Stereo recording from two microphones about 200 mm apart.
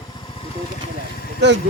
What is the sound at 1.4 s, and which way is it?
Speech, 60° right (ahead or behind).